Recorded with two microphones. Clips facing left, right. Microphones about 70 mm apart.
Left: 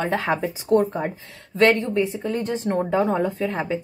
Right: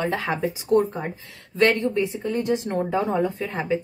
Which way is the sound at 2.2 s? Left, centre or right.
Left.